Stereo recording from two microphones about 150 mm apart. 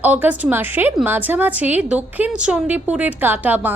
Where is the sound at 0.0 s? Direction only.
10° right (ahead or behind).